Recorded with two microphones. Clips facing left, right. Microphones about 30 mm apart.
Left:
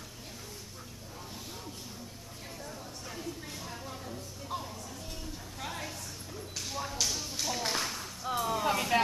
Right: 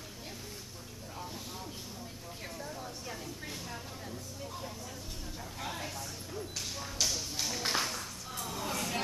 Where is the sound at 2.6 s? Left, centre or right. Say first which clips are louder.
Right 1 dB; centre.